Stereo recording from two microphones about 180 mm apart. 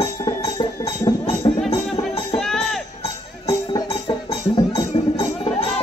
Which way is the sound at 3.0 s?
30° left (ahead or behind).